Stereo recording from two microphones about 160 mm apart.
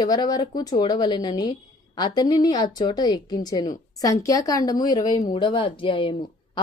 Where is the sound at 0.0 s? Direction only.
25° left (ahead or behind).